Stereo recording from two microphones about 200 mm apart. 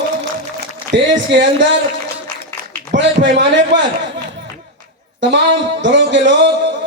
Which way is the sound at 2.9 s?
65° right (ahead or behind).